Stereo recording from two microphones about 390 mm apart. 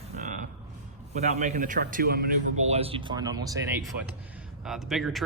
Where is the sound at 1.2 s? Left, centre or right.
Centre.